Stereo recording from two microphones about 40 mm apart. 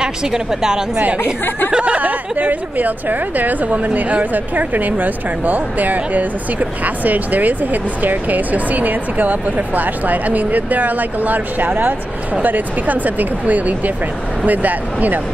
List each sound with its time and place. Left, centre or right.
0.0 s a woman's voice: centre
1.2 s speech: left
1.7 s speech: right
2.0 s a woman's voice: right